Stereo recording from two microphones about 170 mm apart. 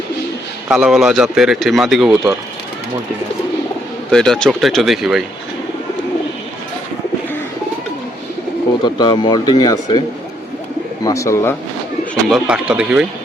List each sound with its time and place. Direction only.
0.7 s speech: 5° right (ahead or behind)
4.1 s speech: 5° left (ahead or behind)
8.8 s speech: 25° left (ahead or behind)
11.0 s speech: 20° left (ahead or behind)
12.3 s speech: 5° right (ahead or behind)